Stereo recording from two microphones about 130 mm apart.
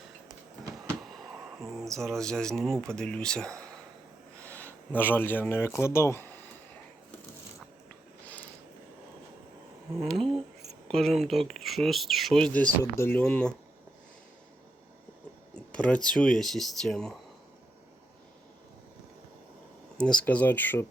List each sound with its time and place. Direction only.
1.8 s speech: 5° left (ahead or behind)
10.2 s a sound: 45° right (ahead or behind)
10.8 s speech: centre (ahead or behind); by 13.2 s 20° left (ahead or behind)
13.2 s speech: 5° left (ahead or behind)
15.7 s speech: 10° left (ahead or behind)
20.0 s speech: 5° left (ahead or behind)